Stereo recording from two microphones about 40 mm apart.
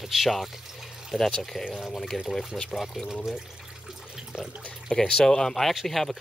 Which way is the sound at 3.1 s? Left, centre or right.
Centre.